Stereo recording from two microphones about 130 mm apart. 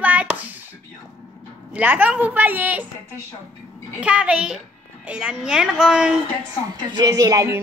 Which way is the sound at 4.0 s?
10° right (ahead or behind).